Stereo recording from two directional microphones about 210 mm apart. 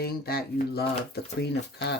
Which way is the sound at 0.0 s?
45° left (ahead or behind).